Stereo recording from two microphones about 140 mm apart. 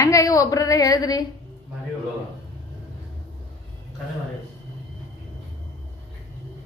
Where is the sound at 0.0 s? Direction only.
25° left (ahead or behind).